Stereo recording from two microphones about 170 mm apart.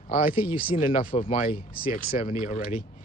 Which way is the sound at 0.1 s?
55° left (ahead or behind).